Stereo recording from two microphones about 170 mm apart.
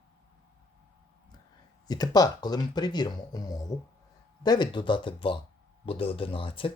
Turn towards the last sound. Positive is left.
turn(degrees=30)  # may be behind; listen again after turning